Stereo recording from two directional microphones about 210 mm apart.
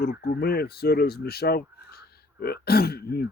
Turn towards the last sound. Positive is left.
turn(degrees=50)  # may be behind; listen again after turning